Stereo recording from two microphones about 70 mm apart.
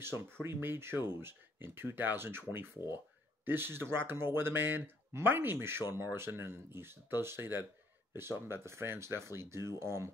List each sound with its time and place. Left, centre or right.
0.0 s speech: right